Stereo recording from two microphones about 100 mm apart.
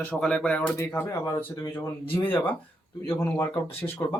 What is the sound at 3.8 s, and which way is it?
Speech, 30° left (ahead or behind).